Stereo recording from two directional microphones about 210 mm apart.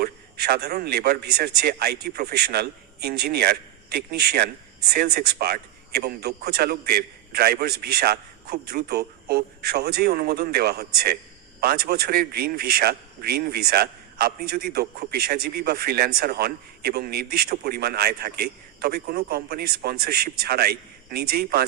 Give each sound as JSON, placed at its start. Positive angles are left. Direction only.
{"t": 0.0, "sound": "a man's voice", "side_deg": -50}